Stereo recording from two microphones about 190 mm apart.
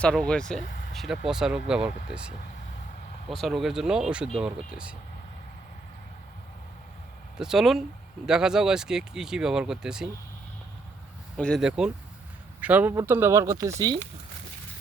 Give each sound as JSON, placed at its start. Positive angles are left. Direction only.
{"t": 0.0, "sound": "speech", "side_deg": 5}
{"t": 0.6, "sound": "vehicle", "side_deg": 45}
{"t": 0.9, "sound": "speech", "side_deg": 0}
{"t": 7.3, "sound": "speech", "side_deg": -5}
{"t": 11.3, "sound": "speech", "side_deg": 5}